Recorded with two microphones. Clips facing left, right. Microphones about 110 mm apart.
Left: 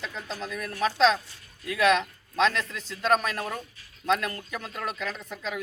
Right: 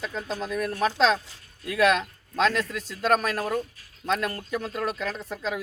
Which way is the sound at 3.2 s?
40° right (ahead or behind).